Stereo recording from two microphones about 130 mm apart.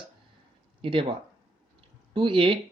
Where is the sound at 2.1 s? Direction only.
40° right (ahead or behind).